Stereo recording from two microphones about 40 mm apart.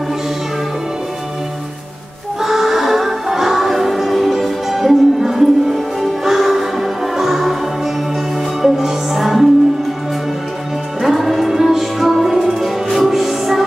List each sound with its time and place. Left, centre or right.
2.4 s music: centre
11.0 s music: centre